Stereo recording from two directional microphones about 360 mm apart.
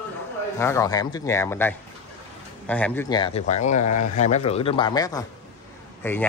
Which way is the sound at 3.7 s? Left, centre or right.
Left.